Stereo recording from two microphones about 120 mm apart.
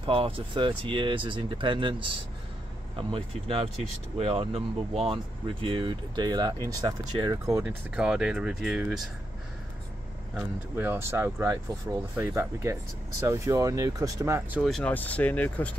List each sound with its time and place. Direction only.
0.0 s speech: 50° right (ahead or behind); by 7.6 s 30° right (ahead or behind)
7.6 s speech: 5° right (ahead or behind)
10.3 s speech: 20° right (ahead or behind)
14.6 s speech: 5° left (ahead or behind)